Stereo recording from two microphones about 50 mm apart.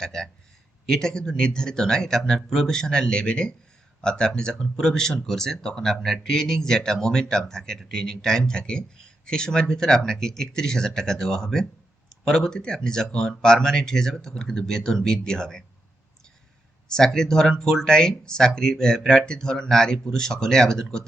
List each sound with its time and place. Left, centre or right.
0.0 s a man's voice: centre
16.9 s a man's voice: centre